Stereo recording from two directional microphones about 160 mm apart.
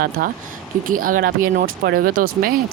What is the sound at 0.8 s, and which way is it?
Speech, 60° right (ahead or behind).